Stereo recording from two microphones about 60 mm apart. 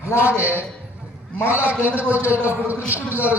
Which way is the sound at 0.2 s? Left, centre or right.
Right.